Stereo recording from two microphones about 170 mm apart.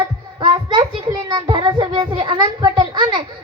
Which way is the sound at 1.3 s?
25° right (ahead or behind).